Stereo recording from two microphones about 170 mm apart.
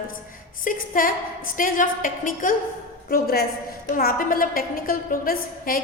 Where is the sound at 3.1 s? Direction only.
65° left (ahead or behind).